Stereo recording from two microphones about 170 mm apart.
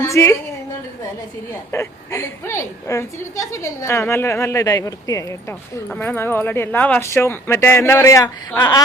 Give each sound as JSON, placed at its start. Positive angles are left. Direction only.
{"t": 0.0, "sound": "a woman's voice", "side_deg": 15}
{"t": 1.7, "sound": "a woman's voice", "side_deg": 15}